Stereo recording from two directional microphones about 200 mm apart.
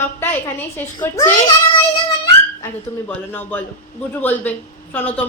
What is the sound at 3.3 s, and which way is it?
A woman's voice, 10° left (ahead or behind).